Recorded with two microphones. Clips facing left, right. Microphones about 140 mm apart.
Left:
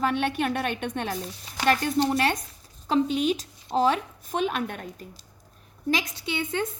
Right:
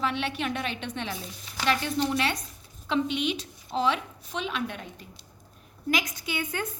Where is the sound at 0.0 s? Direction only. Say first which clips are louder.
Left 4 dB; 45° left (ahead or behind).